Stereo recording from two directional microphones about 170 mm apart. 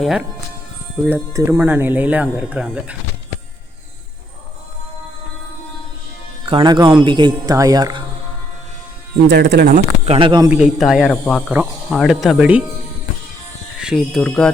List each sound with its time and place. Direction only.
0.0 s speech: 5° right (ahead or behind)
1.0 s speech: 15° right (ahead or behind)
6.4 s speech: 30° right (ahead or behind)
9.2 s speech: 90° right
9.6 s speech: 45° right (ahead or behind)
10.2 s speech: 30° right (ahead or behind)
10.5 s speech: 5° right (ahead or behind)
13.7 s speech: 5° right (ahead or behind)
14.2 s speech: 5° left (ahead or behind)